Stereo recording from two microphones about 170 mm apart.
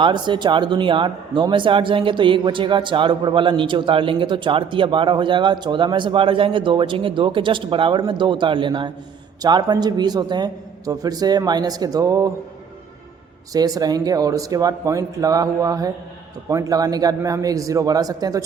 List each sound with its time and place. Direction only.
0.0 s speech: 25° right (ahead or behind)
13.5 s speech: 20° right (ahead or behind)